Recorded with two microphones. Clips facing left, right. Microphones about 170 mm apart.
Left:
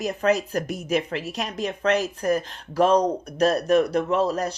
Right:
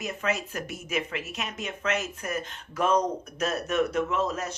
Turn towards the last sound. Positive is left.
turn(degrees=35)  # may be behind; listen again after turning